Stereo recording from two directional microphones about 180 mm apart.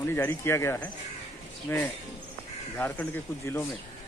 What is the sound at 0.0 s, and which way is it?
Speech, 10° left (ahead or behind).